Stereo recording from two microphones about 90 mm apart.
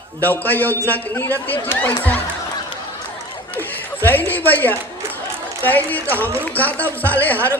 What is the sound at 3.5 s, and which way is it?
A man's voice, 20° left (ahead or behind).